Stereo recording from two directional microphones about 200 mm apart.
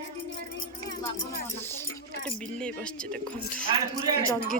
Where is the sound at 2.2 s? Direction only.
5° left (ahead or behind).